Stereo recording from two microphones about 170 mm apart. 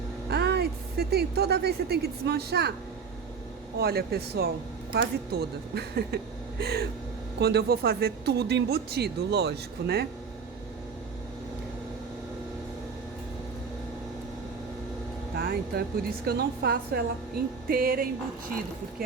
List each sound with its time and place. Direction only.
0.3 s speech: 70° right (ahead or behind)
3.8 s speech: 65° right (ahead or behind)
15.4 s a woman's voice: 65° right (ahead or behind)